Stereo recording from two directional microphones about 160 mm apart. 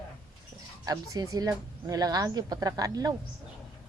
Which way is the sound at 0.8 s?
20° right (ahead or behind).